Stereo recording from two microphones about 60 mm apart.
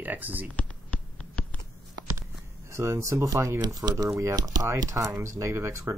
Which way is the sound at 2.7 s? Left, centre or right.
Right.